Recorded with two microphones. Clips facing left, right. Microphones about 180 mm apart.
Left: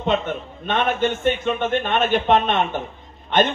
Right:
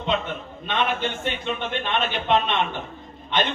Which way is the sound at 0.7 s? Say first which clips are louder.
Left 5 dB; 45° left (ahead or behind).